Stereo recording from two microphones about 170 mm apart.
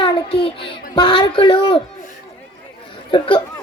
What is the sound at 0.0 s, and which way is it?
Child singing, 30° left (ahead or behind).